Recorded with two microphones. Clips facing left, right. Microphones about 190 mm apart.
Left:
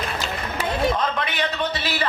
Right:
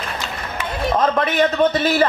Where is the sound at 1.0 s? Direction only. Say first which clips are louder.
Right 8 dB; 45° right (ahead or behind).